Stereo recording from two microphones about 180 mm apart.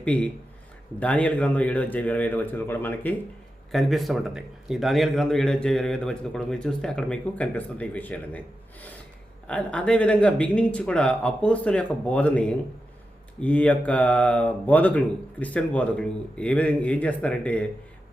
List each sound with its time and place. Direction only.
0.0 s a man's voice: 5° left (ahead or behind)
9.5 s speech: 5° left (ahead or behind)